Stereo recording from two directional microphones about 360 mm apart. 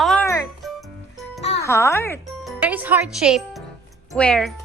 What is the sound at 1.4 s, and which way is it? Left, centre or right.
A woman's voice, centre.